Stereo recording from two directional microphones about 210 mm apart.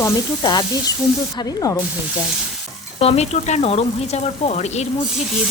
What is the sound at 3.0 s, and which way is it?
A woman's voice, 30° left (ahead or behind).